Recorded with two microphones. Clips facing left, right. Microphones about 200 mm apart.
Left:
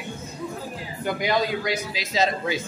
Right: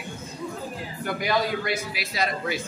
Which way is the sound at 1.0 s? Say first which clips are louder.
Left 2 dB; 20° left (ahead or behind).